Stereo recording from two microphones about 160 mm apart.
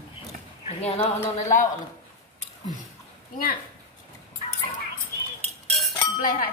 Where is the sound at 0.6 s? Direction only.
40° left (ahead or behind).